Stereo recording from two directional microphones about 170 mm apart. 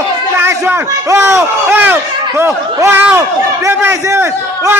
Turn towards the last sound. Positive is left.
turn(degrees=-15)  # may be behind; listen again after turning